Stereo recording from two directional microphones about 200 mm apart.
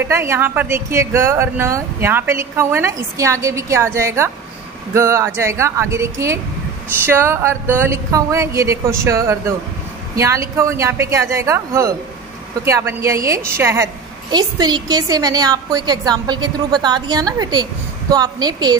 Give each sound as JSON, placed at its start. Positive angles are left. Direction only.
{"t": 0.0, "sound": "a woman's voice", "side_deg": -15}